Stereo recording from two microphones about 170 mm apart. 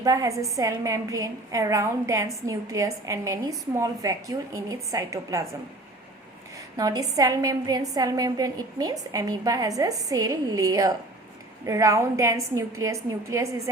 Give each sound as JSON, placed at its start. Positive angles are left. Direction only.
{"t": 0.0, "sound": "a woman's voice", "side_deg": -20}
{"t": 6.7, "sound": "a woman's voice", "side_deg": -20}